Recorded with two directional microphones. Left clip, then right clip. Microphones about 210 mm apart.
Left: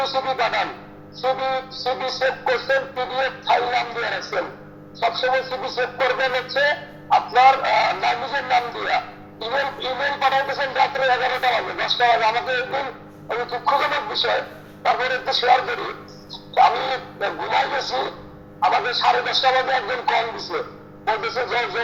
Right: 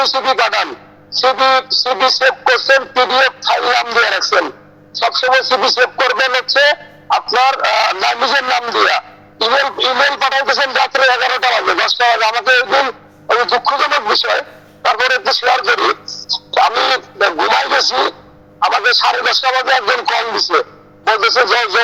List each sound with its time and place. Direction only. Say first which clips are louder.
0.0 s speech: right 8 dB; 45° right (ahead or behind)